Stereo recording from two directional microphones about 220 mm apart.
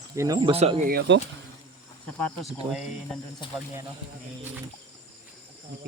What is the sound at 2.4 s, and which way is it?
Speech, centre (ahead or behind).